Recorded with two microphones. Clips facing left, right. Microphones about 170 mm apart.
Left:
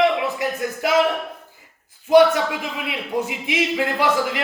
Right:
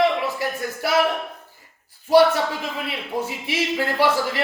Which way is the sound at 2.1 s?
15° left (ahead or behind).